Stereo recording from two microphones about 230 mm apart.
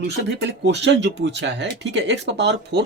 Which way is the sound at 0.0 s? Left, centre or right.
Right.